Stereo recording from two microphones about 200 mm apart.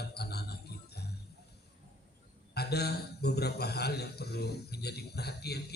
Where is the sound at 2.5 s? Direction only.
55° left (ahead or behind).